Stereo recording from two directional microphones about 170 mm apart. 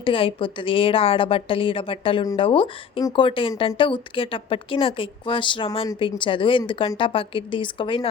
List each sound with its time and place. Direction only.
0.0 s a woman's voice: 30° left (ahead or behind)